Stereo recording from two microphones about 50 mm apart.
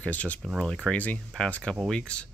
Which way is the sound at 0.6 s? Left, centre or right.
Centre.